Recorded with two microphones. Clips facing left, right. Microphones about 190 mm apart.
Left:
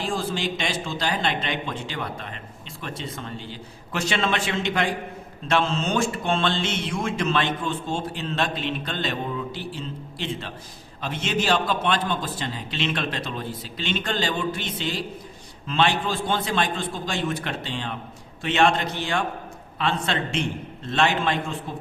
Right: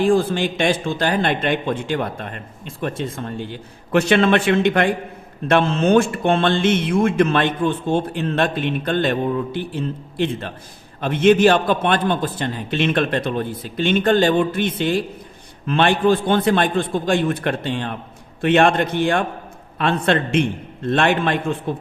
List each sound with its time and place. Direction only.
0.0 s speech: 55° right (ahead or behind)